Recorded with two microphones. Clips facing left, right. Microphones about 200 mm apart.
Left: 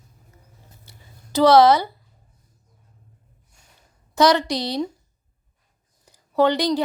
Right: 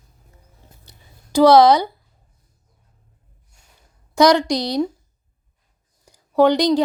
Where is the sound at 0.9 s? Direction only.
10° right (ahead or behind).